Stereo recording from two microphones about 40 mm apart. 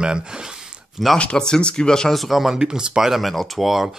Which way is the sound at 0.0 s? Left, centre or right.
Right.